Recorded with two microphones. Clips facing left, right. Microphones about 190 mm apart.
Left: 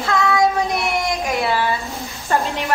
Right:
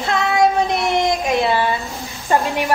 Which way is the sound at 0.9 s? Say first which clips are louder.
Right 4 dB; 20° right (ahead or behind).